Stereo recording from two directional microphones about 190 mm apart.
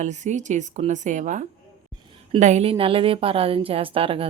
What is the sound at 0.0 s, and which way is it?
A woman's voice, 40° right (ahead or behind).